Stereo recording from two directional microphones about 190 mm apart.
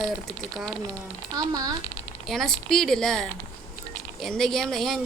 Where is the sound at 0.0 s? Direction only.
Centre (ahead or behind).